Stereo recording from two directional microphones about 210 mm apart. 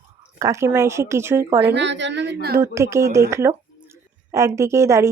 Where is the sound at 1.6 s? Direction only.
55° right (ahead or behind).